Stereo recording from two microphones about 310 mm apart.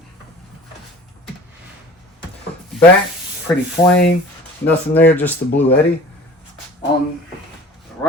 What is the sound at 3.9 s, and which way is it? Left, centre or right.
Speech, left.